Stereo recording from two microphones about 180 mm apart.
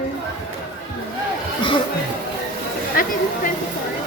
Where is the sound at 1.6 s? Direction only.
25° left (ahead or behind).